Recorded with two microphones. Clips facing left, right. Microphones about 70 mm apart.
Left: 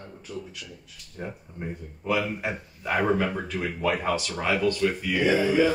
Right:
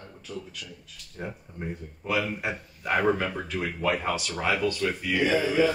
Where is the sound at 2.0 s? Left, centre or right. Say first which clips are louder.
Left 1 dB; centre.